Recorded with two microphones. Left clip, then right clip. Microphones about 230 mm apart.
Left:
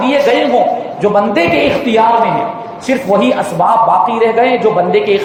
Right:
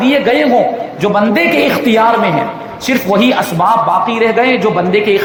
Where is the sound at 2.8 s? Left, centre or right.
Right.